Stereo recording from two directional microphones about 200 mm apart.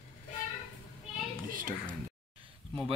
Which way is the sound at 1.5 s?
45° right (ahead or behind).